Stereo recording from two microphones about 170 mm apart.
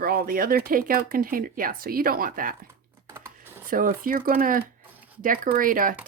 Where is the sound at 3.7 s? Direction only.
55° right (ahead or behind).